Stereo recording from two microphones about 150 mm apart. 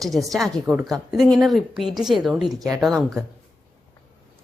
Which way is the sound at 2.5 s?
25° right (ahead or behind).